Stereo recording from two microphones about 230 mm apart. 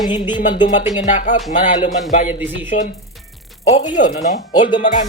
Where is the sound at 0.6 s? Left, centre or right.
Left.